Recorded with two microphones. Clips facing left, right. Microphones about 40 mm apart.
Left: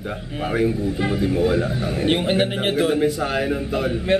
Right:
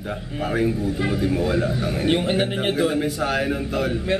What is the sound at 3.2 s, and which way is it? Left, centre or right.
Speech, centre.